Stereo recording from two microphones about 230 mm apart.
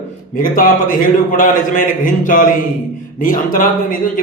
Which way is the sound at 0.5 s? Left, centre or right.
Left.